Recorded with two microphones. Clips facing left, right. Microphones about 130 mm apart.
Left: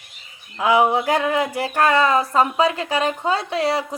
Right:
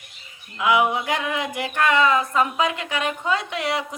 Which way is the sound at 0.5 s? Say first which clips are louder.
Left 3 dB; 35° left (ahead or behind).